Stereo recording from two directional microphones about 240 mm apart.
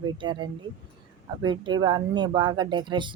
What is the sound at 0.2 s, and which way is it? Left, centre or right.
A woman's voice, centre.